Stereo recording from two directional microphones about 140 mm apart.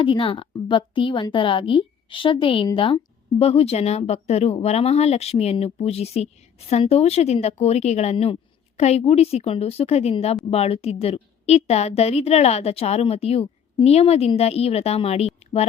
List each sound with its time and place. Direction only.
0.0 s a woman's voice: 40° left (ahead or behind)